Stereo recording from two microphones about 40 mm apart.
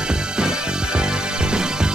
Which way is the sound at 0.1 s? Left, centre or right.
Centre.